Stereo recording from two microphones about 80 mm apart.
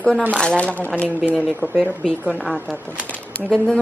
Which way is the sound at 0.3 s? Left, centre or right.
Centre.